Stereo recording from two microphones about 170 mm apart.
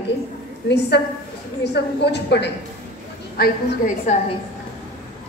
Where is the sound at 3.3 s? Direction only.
65° left (ahead or behind).